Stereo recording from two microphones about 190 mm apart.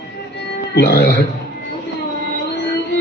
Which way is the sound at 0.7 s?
55° left (ahead or behind).